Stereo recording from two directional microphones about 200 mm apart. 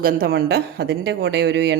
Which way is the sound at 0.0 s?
45° right (ahead or behind).